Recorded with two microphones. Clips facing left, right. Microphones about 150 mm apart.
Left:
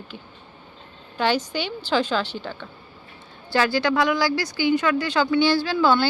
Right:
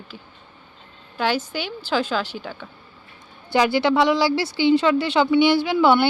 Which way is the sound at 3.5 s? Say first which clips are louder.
Right 3 dB; 20° right (ahead or behind).